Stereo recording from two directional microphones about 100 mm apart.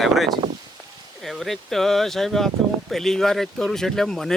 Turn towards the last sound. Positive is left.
turn(degrees=5)  # may be behind; listen again after turning